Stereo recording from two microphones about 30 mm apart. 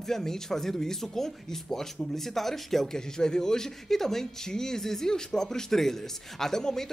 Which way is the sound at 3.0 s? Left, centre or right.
Left.